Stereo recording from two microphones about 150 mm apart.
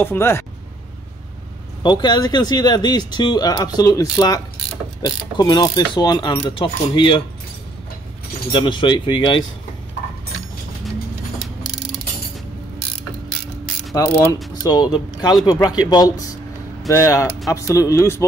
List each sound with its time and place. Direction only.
0.0 s speech: 15° left (ahead or behind)
1.8 s speech: 30° left (ahead or behind)
8.5 s speech: 35° left (ahead or behind)
13.9 s speech: 20° left (ahead or behind)